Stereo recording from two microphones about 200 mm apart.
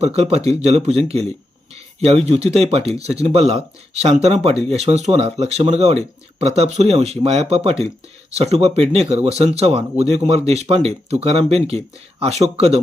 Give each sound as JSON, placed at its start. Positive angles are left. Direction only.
{"t": 0.0, "sound": "speech", "side_deg": -30}